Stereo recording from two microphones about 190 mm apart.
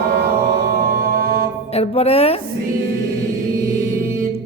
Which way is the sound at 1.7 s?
30° left (ahead or behind).